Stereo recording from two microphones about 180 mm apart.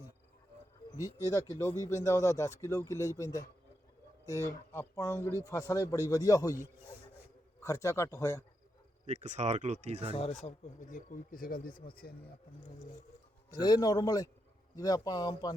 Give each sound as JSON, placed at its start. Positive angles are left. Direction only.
{"t": 0.9, "sound": "speech", "side_deg": 20}
{"t": 9.0, "sound": "speech", "side_deg": -40}
{"t": 10.9, "sound": "speech", "side_deg": 50}
{"t": 13.6, "sound": "speech", "side_deg": 25}